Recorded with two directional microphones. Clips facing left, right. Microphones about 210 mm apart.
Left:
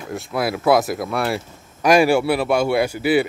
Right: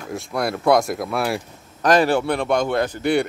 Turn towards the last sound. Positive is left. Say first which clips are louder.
# left 2 dB
turn(degrees=5)  # may be behind; listen again after turning